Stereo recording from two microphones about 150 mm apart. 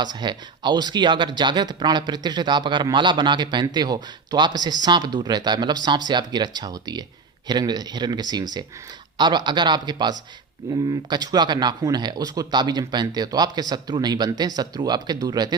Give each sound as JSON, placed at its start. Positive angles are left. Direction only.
{"t": 0.0, "sound": "speech", "side_deg": -30}